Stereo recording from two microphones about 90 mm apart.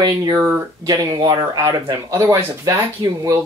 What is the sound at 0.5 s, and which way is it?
Speech, 35° right (ahead or behind).